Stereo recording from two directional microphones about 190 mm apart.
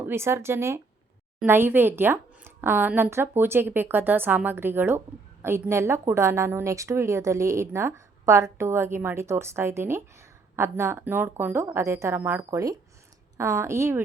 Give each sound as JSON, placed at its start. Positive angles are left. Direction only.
{"t": 0.0, "sound": "speech", "side_deg": -10}